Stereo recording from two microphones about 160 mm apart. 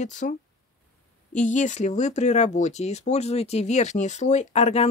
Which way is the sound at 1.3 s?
50° left (ahead or behind).